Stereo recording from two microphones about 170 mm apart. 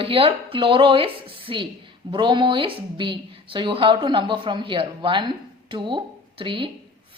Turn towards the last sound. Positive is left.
turn(degrees=-30)  # may be behind; listen again after turning